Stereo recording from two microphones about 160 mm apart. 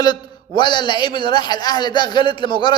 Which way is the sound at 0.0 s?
25° left (ahead or behind).